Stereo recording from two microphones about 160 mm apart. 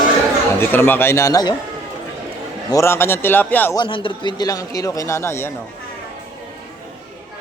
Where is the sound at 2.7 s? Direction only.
15° left (ahead or behind).